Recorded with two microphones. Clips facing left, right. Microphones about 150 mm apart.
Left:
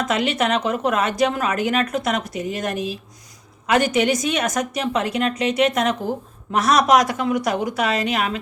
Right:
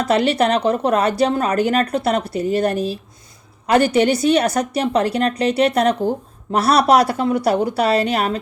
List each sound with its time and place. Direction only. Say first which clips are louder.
0.0 s a woman's voice: right 5 dB; 35° right (ahead or behind)